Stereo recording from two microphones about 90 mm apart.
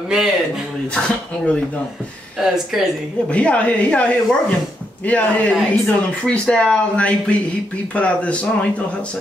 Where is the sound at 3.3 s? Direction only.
15° left (ahead or behind).